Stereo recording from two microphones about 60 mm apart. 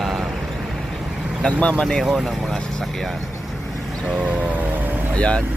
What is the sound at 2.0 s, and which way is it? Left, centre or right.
Speech, centre.